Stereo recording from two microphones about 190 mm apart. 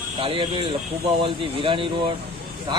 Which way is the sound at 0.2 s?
25° right (ahead or behind).